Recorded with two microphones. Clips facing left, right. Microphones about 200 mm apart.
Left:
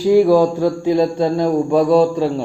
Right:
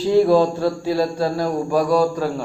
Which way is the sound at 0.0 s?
10° left (ahead or behind).